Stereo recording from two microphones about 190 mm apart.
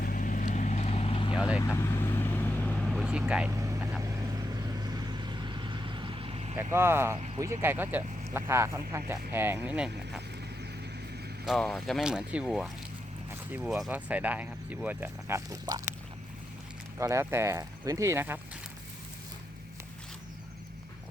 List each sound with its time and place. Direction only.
0.0 s vehicle: 45° left (ahead or behind); by 1.4 s 30° left (ahead or behind)
1.4 s speech: 5° right (ahead or behind)
1.7 s vehicle: 15° left (ahead or behind); by 3.5 s 5° right (ahead or behind)
3.5 s vehicle: 15° right (ahead or behind); by 6.6 s 30° right (ahead or behind)
6.6 s speech: 15° right (ahead or behind)
11.4 s speech: centre (ahead or behind); by 15.8 s 20° right (ahead or behind)
17.0 s speech: 15° right (ahead or behind)